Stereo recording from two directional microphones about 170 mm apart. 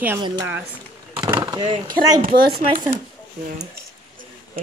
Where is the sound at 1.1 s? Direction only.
25° right (ahead or behind).